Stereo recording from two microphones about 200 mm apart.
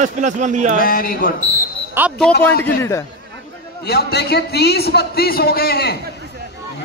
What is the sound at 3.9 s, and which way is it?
A man's voice, 55° left (ahead or behind).